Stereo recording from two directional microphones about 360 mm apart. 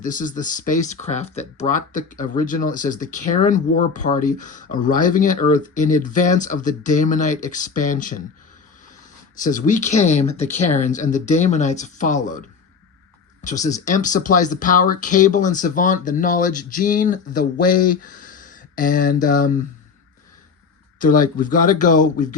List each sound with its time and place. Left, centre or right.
0.0 s speech: left
9.4 s speech: left
13.4 s speech: left
21.0 s speech: left